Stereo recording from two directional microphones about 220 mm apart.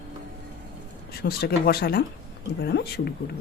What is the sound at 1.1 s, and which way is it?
Speech, 45° left (ahead or behind).